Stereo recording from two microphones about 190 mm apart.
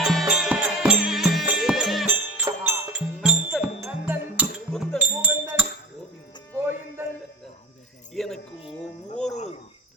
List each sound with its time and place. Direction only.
0.0 s music: centre (ahead or behind)
4.7 s music: 5° left (ahead or behind)
4.9 s music: 5° right (ahead or behind)
8.1 s music: centre (ahead or behind)
8.6 s music: 35° left (ahead or behind)
9.3 s cricket: 35° left (ahead or behind)